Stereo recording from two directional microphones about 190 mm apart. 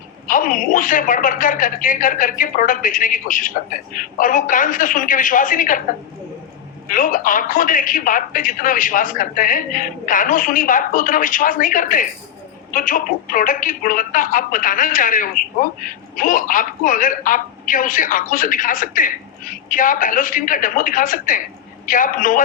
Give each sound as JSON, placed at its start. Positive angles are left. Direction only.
{"t": 0.3, "sound": "speech", "side_deg": 45}
{"t": 6.8, "sound": "speech", "side_deg": 45}